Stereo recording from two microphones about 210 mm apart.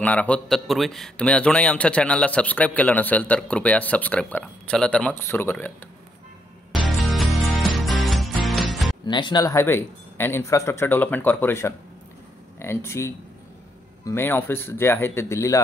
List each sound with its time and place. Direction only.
0.0 s a man's voice: 5° left (ahead or behind)
6.7 s music: centre (ahead or behind)
9.0 s a man's voice: 20° left (ahead or behind)